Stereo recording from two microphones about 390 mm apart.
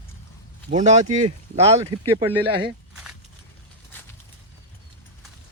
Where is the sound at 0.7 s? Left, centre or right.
Centre.